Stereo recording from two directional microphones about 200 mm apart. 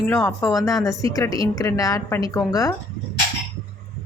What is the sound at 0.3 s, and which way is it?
A woman's voice, 15° left (ahead or behind).